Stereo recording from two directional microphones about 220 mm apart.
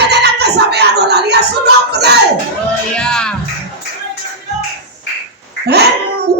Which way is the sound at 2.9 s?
5° left (ahead or behind).